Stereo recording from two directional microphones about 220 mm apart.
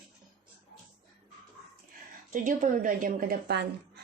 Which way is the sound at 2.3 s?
35° right (ahead or behind).